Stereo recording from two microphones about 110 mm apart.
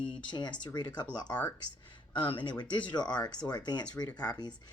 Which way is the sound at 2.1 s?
45° left (ahead or behind).